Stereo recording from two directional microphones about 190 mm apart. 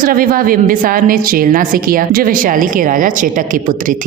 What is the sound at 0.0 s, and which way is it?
A woman's voice, 50° right (ahead or behind).